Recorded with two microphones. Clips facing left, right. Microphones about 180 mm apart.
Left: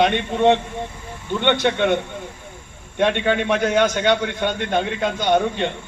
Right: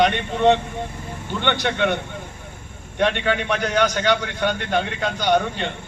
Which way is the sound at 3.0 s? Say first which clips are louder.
Left 2 dB; 25° left (ahead or behind).